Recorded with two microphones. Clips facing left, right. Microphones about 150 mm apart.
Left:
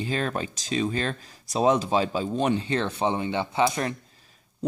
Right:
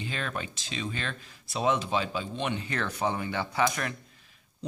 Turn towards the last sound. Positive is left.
turn(degrees=35)  # may be behind; listen again after turning